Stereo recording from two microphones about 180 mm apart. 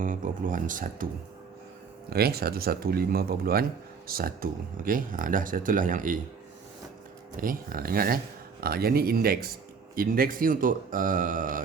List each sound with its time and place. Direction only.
0.0 s speech: 50° right (ahead or behind)
2.0 s speech: 60° right (ahead or behind)
7.3 s speech: 50° right (ahead or behind)